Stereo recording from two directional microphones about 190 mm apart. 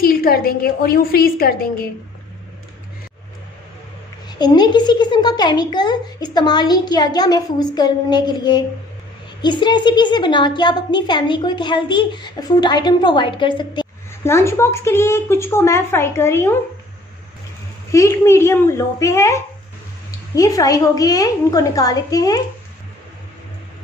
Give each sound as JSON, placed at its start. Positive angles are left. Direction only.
{"t": 0.0, "sound": "a woman's voice", "side_deg": 50}
{"t": 4.3, "sound": "a child's voice", "side_deg": 20}
{"t": 14.2, "sound": "speech", "side_deg": 15}
{"t": 17.9, "sound": "a child's voice", "side_deg": 15}